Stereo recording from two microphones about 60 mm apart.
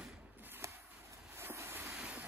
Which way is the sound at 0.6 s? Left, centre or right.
Right.